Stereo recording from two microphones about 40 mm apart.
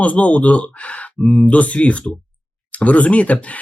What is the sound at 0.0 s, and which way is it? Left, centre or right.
Speech, left.